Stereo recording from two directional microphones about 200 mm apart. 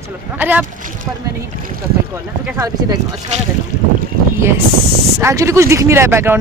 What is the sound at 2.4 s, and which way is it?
Speech, 5° right (ahead or behind).